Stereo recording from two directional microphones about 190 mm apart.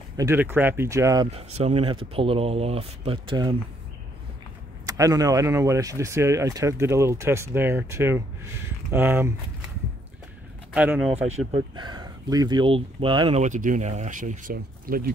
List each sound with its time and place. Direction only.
0.2 s speech: 10° right (ahead or behind)
1.3 s speech: 35° right (ahead or behind)
4.8 s speech: 20° right (ahead or behind)
10.7 s speech: 5° right (ahead or behind)
11.2 s speech: 25° right (ahead or behind)
13.4 s speech: 40° right (ahead or behind)